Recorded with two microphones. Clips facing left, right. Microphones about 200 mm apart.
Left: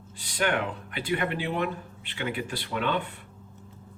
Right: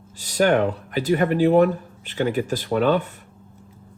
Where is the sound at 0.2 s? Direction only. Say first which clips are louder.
Right 9 dB; 40° right (ahead or behind).